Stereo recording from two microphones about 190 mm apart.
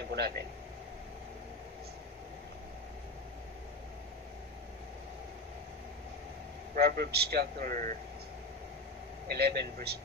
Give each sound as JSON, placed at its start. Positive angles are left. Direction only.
{"t": 0.1, "sound": "speech", "side_deg": -60}
{"t": 6.7, "sound": "a man's voice", "side_deg": -50}
{"t": 9.3, "sound": "a man's voice", "side_deg": -60}